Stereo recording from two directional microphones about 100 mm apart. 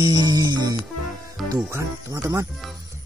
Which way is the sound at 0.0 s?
45° right (ahead or behind).